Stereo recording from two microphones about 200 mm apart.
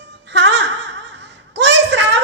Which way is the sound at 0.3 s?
60° right (ahead or behind).